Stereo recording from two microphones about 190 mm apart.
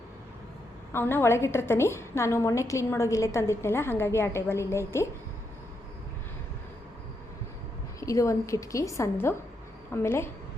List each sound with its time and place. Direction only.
0.9 s a woman's voice: 10° left (ahead or behind)
8.0 s a woman's voice: 15° left (ahead or behind)